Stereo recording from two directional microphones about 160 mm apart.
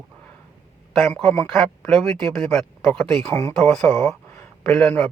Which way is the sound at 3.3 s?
20° left (ahead or behind).